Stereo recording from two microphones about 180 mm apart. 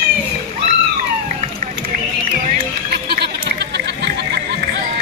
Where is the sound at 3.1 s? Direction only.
65° right (ahead or behind).